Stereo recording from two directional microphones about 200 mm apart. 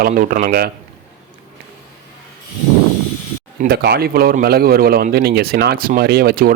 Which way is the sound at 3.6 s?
50° right (ahead or behind).